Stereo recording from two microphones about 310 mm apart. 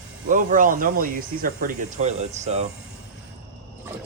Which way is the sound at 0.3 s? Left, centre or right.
Right.